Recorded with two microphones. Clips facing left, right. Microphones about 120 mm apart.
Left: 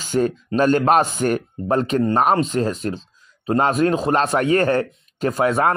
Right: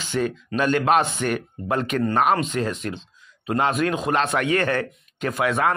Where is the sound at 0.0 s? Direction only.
40° left (ahead or behind).